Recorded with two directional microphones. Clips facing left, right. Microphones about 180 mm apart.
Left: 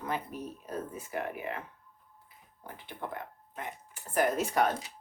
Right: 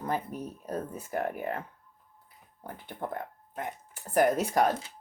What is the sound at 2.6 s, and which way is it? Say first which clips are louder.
Speech: right 3 dB; 45° right (ahead or behind).